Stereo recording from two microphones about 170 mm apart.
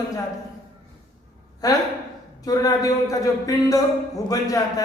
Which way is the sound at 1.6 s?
20° left (ahead or behind).